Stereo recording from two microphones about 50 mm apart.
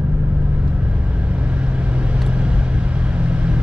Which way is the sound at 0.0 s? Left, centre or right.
Right.